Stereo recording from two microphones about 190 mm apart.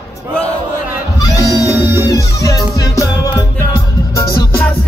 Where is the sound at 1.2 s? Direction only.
20° left (ahead or behind).